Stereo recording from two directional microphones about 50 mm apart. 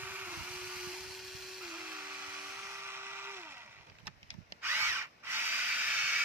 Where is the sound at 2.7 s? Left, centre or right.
Right.